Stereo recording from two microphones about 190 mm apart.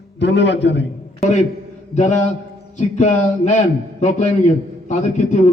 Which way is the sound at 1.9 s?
35° left (ahead or behind).